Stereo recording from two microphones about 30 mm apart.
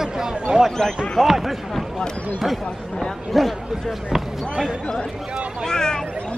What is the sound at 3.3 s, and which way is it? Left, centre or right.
Speech, centre.